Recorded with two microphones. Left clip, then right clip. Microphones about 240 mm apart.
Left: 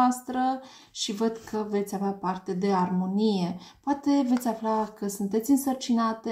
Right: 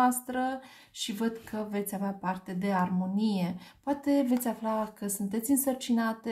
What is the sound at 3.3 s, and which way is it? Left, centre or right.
Speech, right.